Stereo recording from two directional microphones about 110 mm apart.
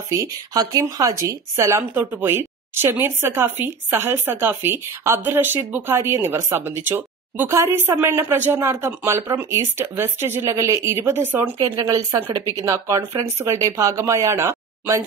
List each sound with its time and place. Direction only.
0.1 s speech: 30° right (ahead or behind)
11.6 s speech: 35° right (ahead or behind)